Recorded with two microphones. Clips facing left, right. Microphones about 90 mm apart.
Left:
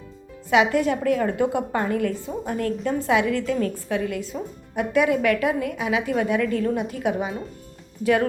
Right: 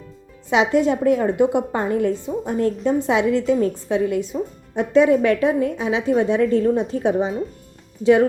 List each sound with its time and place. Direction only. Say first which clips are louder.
0.5 s a woman's voice: right 2 dB; 20° right (ahead or behind)